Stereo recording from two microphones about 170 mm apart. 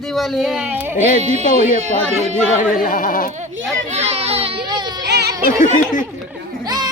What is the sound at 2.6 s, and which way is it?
Speech, 55° left (ahead or behind).